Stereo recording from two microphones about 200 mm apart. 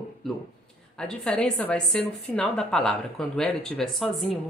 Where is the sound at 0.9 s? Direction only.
5° left (ahead or behind).